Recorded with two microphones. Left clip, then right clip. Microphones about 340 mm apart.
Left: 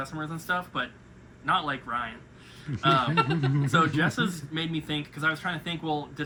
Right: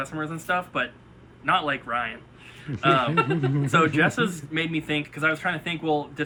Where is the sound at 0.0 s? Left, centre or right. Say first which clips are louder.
Right 4 dB; centre.